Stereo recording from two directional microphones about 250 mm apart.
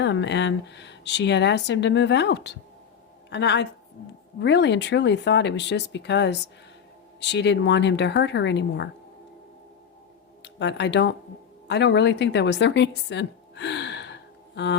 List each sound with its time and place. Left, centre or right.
0.0 s speech: left
10.4 s speech: left